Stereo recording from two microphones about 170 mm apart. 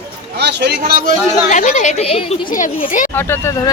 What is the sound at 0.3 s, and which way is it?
Speech, 75° right (ahead or behind).